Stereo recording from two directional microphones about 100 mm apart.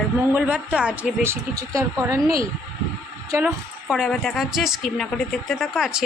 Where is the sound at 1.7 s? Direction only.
30° right (ahead or behind).